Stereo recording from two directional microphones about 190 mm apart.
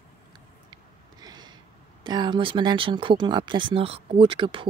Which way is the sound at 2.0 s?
25° right (ahead or behind).